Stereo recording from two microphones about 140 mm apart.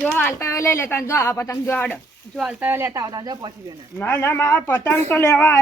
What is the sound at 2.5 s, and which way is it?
Speech, 15° right (ahead or behind).